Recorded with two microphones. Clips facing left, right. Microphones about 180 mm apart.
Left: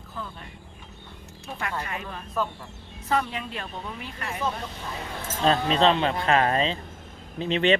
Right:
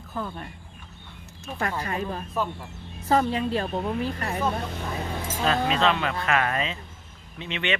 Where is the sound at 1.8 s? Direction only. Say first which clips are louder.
Right 5 dB; 35° right (ahead or behind).